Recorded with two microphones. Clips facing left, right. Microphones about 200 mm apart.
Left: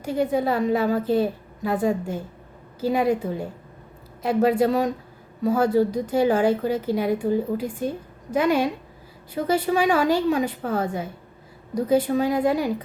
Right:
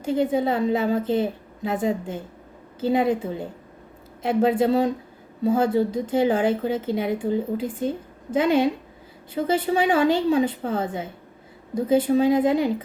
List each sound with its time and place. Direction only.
0.0 s a woman's voice: 25° right (ahead or behind)